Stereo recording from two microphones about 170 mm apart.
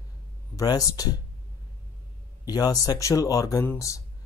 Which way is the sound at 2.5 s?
25° left (ahead or behind).